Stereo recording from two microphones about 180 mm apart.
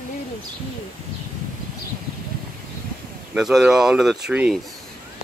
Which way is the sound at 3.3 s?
5° right (ahead or behind).